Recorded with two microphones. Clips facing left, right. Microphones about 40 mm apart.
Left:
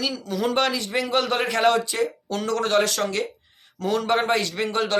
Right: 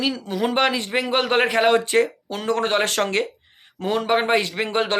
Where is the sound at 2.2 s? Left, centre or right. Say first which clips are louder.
Even; centre.